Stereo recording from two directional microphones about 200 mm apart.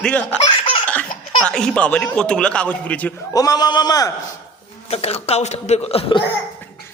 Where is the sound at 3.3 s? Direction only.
20° left (ahead or behind).